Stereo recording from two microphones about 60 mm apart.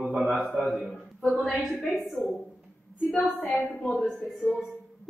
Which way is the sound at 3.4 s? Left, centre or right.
Left.